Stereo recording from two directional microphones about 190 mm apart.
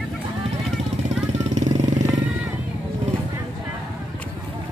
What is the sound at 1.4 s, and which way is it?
Vehicle, 40° right (ahead or behind).